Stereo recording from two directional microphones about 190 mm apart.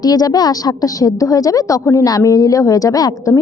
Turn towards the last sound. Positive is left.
turn(degrees=15)  # may be behind; listen again after turning